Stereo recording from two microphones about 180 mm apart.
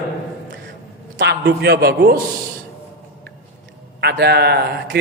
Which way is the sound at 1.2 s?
70° right (ahead or behind).